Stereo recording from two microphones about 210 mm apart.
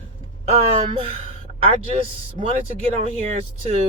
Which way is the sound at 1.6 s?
25° right (ahead or behind).